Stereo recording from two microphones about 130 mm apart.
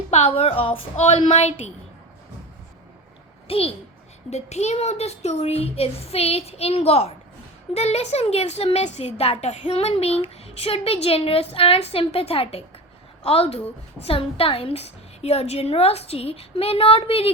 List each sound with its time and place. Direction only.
0.1 s a woman's voice: 50° left (ahead or behind)
3.4 s a child's voice: 50° left (ahead or behind)
4.3 s a woman's voice: 60° left (ahead or behind)